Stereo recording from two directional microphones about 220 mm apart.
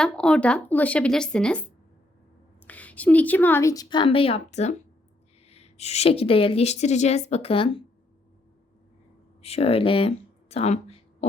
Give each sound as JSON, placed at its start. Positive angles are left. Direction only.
{"t": 0.0, "sound": "speech", "side_deg": 5}
{"t": 2.6, "sound": "a woman's voice", "side_deg": 5}
{"t": 9.4, "sound": "speech", "side_deg": 25}